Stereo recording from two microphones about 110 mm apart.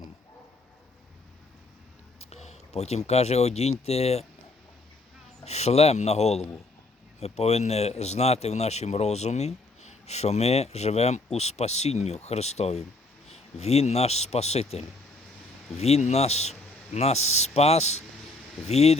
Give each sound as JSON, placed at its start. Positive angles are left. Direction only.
{"t": 2.1, "sound": "speech", "side_deg": 75}
{"t": 5.5, "sound": "speech", "side_deg": 75}